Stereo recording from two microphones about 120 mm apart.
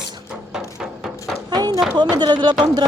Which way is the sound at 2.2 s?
40° right (ahead or behind).